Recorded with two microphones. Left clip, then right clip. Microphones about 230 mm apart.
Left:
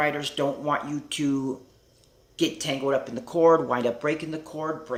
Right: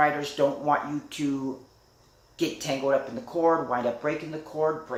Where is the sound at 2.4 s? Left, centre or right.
Left.